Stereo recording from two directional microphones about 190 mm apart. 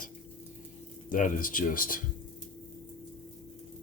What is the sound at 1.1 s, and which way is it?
Speech, 45° left (ahead or behind).